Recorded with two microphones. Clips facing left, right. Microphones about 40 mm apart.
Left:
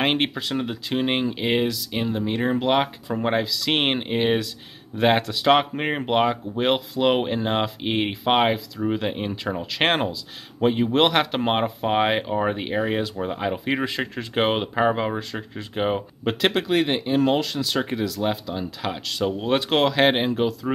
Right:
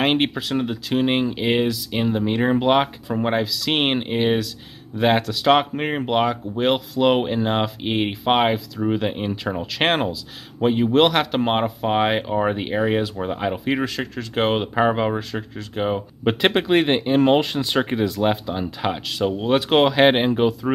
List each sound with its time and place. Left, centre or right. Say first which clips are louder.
0.0 s speech: right 3 dB; centre
2.0 s speech: right 4 dB; centre
3.1 s speech: right 2 dB; centre
13.8 s speech: even; centre
14.8 s speech: right 3 dB; centre
15.5 s speech: even; centre
16.3 s speech: right 3 dB; right
16.6 s speech: right 4 dB; right
19.0 s speech: even; centre